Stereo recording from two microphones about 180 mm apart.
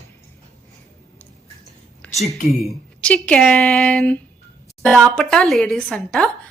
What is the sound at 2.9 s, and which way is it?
A woman's voice, 5° left (ahead or behind).